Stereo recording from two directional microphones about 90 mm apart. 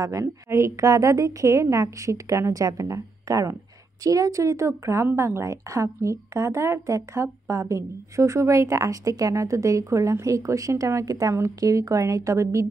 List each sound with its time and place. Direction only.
0.0 s speech: 35° right (ahead or behind)